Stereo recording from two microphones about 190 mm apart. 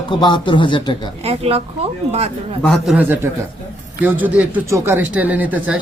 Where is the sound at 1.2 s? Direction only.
30° right (ahead or behind).